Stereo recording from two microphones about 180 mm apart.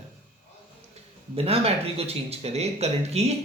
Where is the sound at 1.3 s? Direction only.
35° right (ahead or behind).